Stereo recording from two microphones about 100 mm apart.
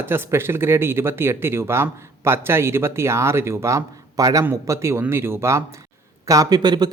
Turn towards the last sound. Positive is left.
turn(degrees=-45)  # may be behind; listen again after turning